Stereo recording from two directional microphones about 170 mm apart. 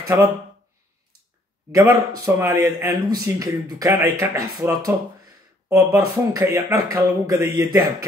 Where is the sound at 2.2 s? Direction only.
20° right (ahead or behind).